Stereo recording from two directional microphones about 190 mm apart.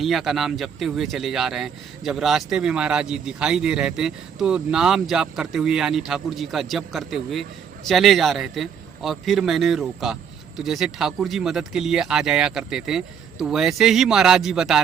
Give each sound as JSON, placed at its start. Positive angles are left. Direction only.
{"t": 0.0, "sound": "speech", "side_deg": 0}